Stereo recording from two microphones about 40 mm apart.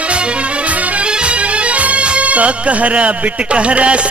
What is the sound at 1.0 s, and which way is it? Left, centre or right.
Music, right.